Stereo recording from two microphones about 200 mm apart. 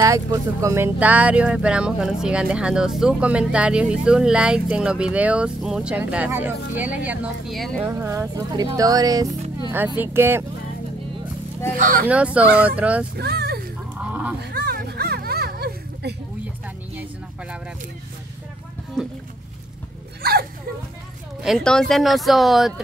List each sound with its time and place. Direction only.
0.0 s speech: 15° right (ahead or behind); by 7.8 s centre (ahead or behind)
7.8 s speech: 10° right (ahead or behind)
11.7 s speech: 45° right (ahead or behind)
12.1 s speech: 5° right (ahead or behind)
13.1 s speech: 55° right (ahead or behind)
13.9 s honk: 5° right (ahead or behind)
14.4 s a sound: 50° right (ahead or behind)
20.2 s a sound: 50° right (ahead or behind)
21.4 s speech: centre (ahead or behind)